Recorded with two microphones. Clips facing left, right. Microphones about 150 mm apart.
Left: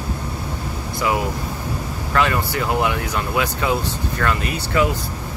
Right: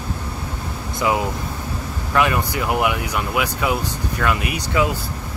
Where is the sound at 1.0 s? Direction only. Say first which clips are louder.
Right 1 dB; 20° right (ahead or behind).